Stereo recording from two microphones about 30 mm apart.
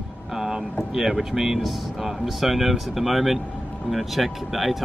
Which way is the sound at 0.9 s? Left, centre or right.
Centre.